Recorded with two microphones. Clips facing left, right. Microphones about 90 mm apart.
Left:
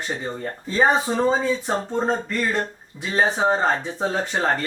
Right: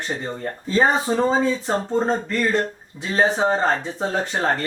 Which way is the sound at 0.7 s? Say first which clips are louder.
Right 1 dB; 5° left (ahead or behind).